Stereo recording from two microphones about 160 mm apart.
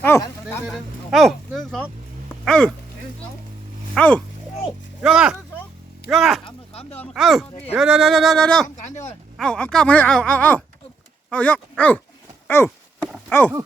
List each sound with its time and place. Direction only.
0.0 s speech: 15° left (ahead or behind)
0.7 s speech: centre (ahead or behind)
3.9 s speech: 10° left (ahead or behind)
4.6 s speech: 5° right (ahead or behind)
8.6 s speech: 50° left (ahead or behind)
9.4 s speech: 5° left (ahead or behind)
12.5 s a sound: 15° left (ahead or behind)